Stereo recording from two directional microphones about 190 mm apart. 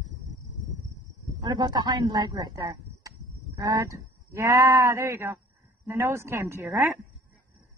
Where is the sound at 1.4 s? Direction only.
20° right (ahead or behind).